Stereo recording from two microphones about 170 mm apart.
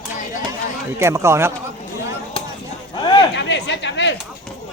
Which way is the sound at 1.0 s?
15° right (ahead or behind).